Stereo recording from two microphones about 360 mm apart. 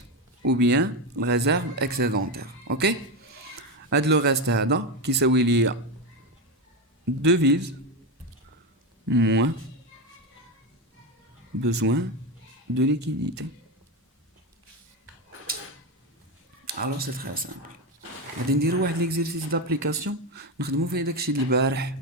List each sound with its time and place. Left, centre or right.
0.4 s a man's voice: right
7.2 s speech: right
9.0 s speech: right
11.6 s speech: right
16.6 s speech: right
18.5 s speech: right